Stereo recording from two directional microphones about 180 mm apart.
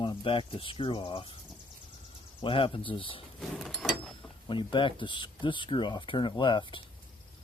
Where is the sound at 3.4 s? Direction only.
Centre (ahead or behind).